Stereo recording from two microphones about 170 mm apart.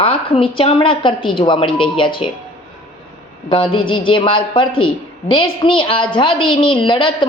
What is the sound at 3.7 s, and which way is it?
A woman's voice, 30° left (ahead or behind).